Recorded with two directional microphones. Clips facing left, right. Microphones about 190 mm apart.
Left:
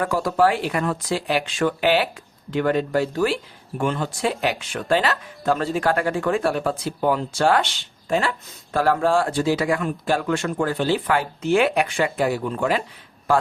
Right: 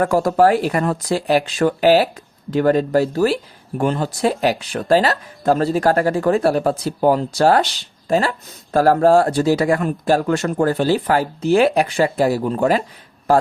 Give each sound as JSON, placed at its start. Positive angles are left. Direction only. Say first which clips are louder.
{"t": 0.0, "sound": "speech", "louder": "right 5 dB", "side_deg": -45}